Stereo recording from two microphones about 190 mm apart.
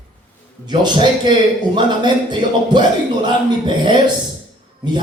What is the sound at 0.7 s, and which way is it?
Speech, 25° right (ahead or behind).